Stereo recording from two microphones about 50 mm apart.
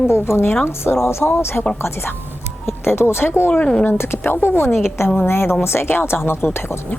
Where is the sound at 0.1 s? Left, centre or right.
Left.